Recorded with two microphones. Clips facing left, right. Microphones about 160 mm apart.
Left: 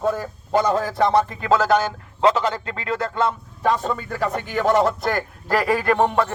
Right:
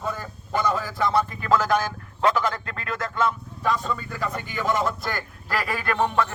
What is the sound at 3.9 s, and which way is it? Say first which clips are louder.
Speech: left 5 dB; 60° left (ahead or behind).